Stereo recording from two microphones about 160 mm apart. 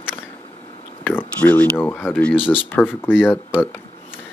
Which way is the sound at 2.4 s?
35° left (ahead or behind).